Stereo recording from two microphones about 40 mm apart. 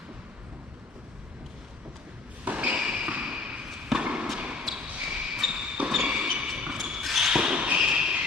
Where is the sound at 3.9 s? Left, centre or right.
Right.